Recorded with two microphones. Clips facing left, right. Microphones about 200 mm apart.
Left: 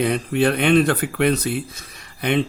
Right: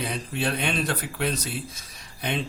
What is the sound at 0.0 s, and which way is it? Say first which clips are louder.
Speech: left 10 dB; 60° left (ahead or behind).